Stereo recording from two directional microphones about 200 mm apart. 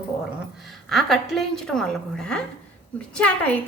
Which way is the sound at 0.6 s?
Centre (ahead or behind).